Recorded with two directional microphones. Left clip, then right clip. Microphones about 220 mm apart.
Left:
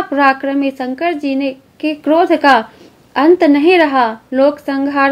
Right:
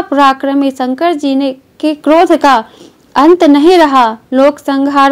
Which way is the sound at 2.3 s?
20° right (ahead or behind).